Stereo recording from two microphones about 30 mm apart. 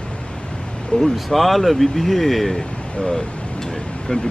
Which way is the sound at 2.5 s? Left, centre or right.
Centre.